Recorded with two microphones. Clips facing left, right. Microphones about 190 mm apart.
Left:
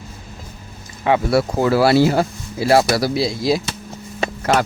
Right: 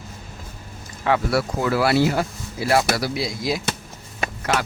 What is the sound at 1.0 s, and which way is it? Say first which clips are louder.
Speech: left 4 dB; 25° left (ahead or behind).